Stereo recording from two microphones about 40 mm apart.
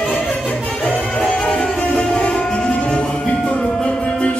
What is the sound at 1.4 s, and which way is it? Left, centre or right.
Music, left.